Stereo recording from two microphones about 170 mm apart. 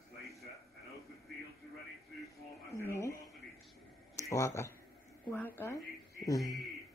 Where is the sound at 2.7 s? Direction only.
15° left (ahead or behind).